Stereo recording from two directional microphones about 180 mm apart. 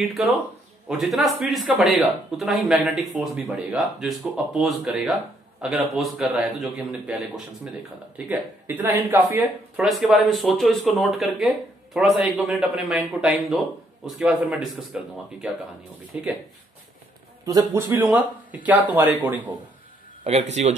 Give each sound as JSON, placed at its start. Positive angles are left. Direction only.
{"t": 0.8, "sound": "speech", "side_deg": 0}
{"t": 17.5, "sound": "speech", "side_deg": -20}
{"t": 20.2, "sound": "a man's voice", "side_deg": -35}